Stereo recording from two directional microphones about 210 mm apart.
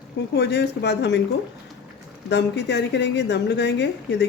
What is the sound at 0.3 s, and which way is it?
Speech, 55° left (ahead or behind).